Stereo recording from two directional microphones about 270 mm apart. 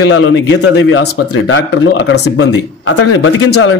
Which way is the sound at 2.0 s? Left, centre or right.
Left.